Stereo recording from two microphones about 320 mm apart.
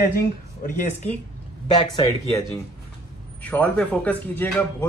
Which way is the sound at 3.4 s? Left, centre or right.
Centre.